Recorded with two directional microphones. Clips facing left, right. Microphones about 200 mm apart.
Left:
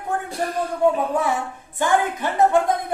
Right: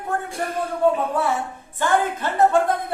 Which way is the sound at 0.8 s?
15° left (ahead or behind).